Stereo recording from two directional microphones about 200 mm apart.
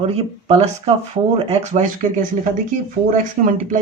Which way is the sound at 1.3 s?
35° right (ahead or behind).